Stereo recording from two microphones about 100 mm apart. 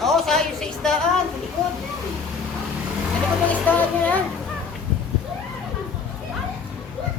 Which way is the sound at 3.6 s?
15° left (ahead or behind).